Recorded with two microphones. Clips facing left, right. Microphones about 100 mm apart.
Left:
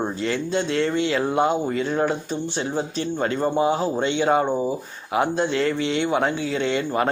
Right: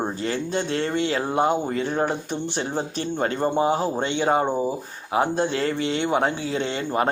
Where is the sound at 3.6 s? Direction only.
40° right (ahead or behind).